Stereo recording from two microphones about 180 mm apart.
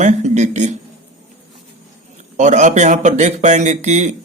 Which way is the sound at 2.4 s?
40° right (ahead or behind).